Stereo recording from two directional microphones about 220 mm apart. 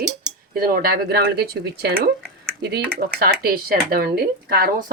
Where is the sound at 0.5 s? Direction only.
45° right (ahead or behind).